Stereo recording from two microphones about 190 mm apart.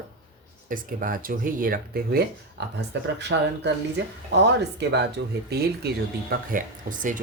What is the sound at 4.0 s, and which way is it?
Speech, 65° right (ahead or behind).